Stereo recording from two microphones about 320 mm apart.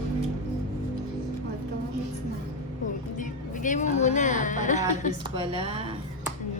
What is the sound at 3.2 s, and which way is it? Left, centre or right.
Speech, left.